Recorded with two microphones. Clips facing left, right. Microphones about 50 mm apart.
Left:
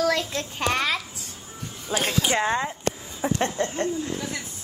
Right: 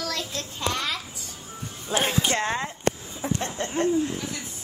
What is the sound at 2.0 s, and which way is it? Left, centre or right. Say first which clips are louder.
Speech: right 1 dB; right.